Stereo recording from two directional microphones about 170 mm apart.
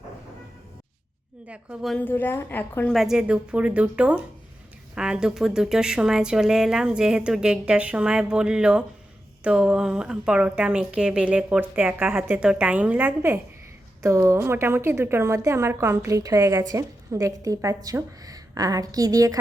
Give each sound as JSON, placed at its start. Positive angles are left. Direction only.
{"t": 1.5, "sound": "a woman's voice", "side_deg": -5}
{"t": 2.9, "sound": "a woman's voice", "side_deg": 0}